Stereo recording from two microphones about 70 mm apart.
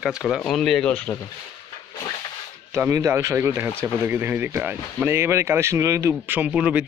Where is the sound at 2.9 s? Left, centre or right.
Right.